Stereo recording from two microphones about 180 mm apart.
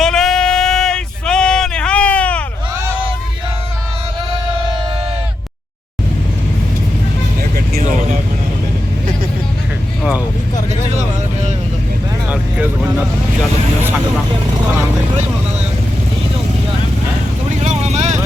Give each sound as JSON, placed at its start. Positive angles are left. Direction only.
{"t": 0.0, "sound": "a sound", "side_deg": 0}
{"t": 7.5, "sound": "vehicle", "side_deg": -55}
{"t": 10.0, "sound": "vehicle", "side_deg": -5}
{"t": 12.3, "sound": "vehicle", "side_deg": -10}
{"t": 17.6, "sound": "vehicle", "side_deg": -40}